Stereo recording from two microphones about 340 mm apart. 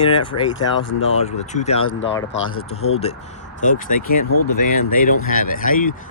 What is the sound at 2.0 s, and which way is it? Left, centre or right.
Speech, left.